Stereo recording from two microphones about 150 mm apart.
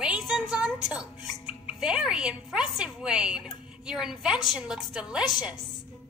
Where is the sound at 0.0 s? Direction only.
5° right (ahead or behind).